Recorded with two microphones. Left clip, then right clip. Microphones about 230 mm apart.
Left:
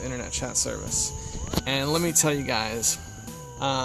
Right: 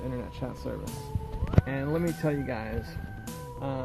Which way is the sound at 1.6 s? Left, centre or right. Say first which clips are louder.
Left 9 dB; left.